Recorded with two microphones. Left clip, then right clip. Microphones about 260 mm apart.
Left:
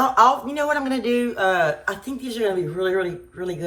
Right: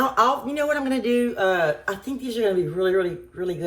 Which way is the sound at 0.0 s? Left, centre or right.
Centre.